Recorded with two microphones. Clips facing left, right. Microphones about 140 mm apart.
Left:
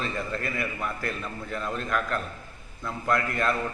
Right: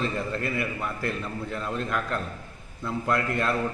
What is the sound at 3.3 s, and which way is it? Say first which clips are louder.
Speech: even; 25° right (ahead or behind).